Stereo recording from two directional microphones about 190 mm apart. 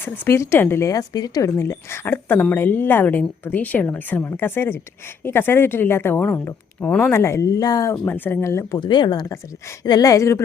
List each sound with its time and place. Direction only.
0.0 s speech: 15° left (ahead or behind)